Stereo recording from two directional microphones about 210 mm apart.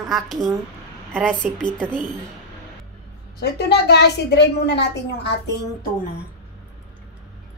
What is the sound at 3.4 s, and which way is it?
A woman's voice, 50° left (ahead or behind).